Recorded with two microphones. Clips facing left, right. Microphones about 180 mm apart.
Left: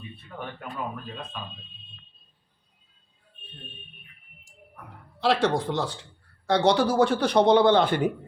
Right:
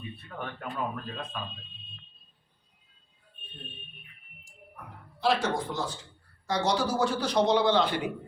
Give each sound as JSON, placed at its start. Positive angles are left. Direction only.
{"t": 5.2, "sound": "speech", "side_deg": 65}